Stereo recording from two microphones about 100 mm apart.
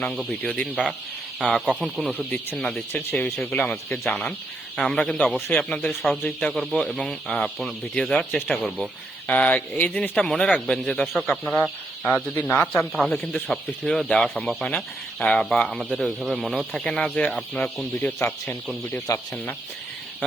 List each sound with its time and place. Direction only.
0.0 s speech: 5° left (ahead or behind)
2.0 s speech: 15° left (ahead or behind)
2.9 s speech: 20° left (ahead or behind); by 8.9 s centre (ahead or behind)
9.2 s speech: 15° left (ahead or behind); by 11.3 s centre (ahead or behind)
11.4 s speech: 15° left (ahead or behind)
12.5 s speech: 5° left (ahead or behind)
13.1 s speech: 15° left (ahead or behind)
13.5 s speech: 5° left (ahead or behind)
18.9 s speech: 30° left (ahead or behind)